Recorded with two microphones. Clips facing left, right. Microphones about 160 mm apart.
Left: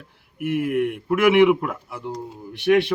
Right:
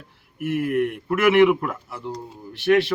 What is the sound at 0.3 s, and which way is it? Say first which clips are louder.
A man's voice: even; 10° left (ahead or behind).